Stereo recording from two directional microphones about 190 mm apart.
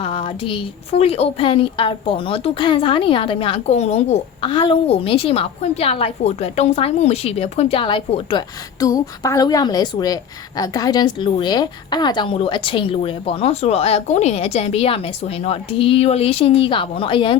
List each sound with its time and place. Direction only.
0.0 s a woman's voice: 30° left (ahead or behind)